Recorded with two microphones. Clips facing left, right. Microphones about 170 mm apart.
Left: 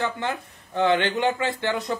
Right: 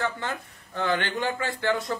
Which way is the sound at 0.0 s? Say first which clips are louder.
Left 3 dB; 20° left (ahead or behind).